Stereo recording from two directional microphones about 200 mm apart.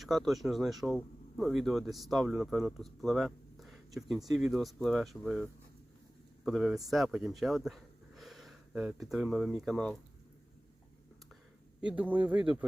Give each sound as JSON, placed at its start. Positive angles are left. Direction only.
{"t": 0.0, "sound": "speech", "side_deg": 0}
{"t": 11.8, "sound": "speech", "side_deg": -5}